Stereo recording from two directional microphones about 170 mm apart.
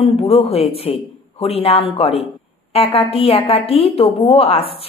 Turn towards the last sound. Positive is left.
turn(degrees=35)  # may be behind; listen again after turning